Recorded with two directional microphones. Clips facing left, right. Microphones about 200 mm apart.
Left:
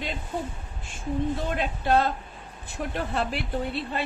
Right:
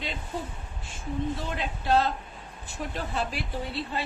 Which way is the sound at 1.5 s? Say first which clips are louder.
Left 1 dB; 55° left (ahead or behind).